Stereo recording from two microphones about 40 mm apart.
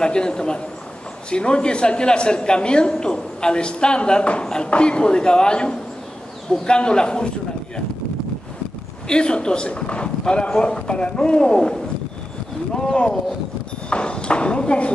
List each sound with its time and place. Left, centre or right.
0.0 s a woman's voice: left
9.1 s a woman's voice: left
12.7 s a woman's voice: left